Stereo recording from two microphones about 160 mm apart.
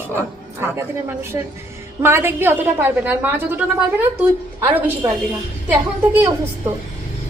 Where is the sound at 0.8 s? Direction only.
15° right (ahead or behind).